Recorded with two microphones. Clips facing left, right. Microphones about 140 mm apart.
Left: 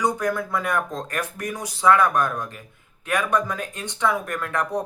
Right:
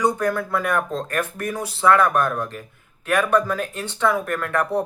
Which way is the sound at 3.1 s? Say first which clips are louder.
Right 4 dB; 15° left (ahead or behind).